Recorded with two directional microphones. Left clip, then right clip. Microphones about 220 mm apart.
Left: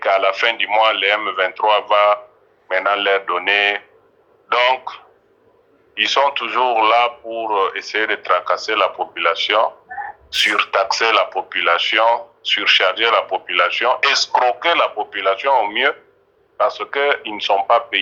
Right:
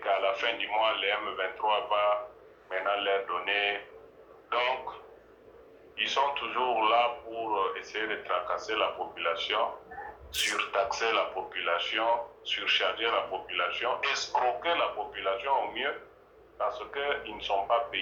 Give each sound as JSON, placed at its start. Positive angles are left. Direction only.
{"t": 0.0, "sound": "speech", "side_deg": 45}